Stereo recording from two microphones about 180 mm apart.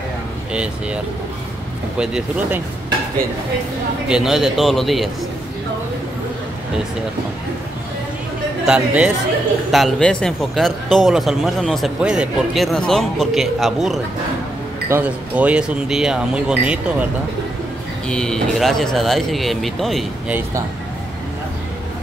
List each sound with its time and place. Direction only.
2.0 s speech: 5° right (ahead or behind)
4.1 s speech: centre (ahead or behind)
8.6 s speech: 5° right (ahead or behind)
18.0 s speech: 5° left (ahead or behind)